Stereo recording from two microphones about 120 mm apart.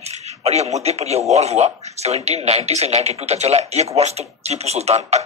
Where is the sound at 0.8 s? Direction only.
60° right (ahead or behind).